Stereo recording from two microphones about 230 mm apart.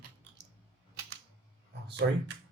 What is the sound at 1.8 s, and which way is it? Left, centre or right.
Speech, right.